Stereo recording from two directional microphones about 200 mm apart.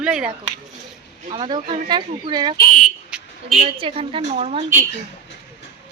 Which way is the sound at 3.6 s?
25° right (ahead or behind).